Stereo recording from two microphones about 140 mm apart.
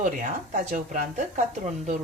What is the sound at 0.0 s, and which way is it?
Speech, 60° right (ahead or behind).